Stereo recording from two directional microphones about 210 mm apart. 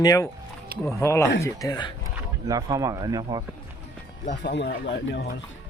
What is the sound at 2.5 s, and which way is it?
Speech, 15° right (ahead or behind).